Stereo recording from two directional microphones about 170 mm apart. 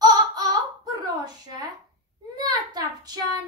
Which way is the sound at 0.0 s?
25° right (ahead or behind).